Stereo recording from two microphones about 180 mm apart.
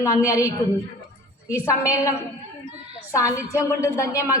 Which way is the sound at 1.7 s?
20° left (ahead or behind).